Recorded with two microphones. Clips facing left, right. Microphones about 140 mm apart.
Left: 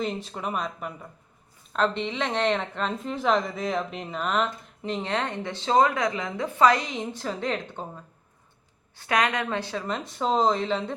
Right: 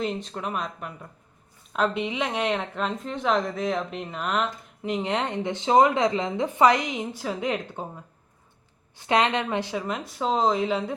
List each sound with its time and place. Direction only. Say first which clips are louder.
0.0 s a woman's voice: right 1 dB; 5° left (ahead or behind)
4.9 s a woman's voice: right 2 dB; 15° right (ahead or behind)
9.0 s a woman's voice: right 2 dB; 25° right (ahead or behind)
9.8 s a woman's voice: even; 5° right (ahead or behind)